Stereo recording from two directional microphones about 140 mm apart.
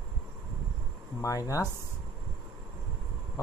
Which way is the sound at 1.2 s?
25° left (ahead or behind).